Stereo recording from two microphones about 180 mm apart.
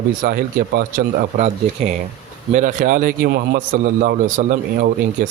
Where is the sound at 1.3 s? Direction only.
40° right (ahead or behind).